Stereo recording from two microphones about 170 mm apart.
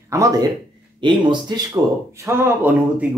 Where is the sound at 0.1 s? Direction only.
20° right (ahead or behind).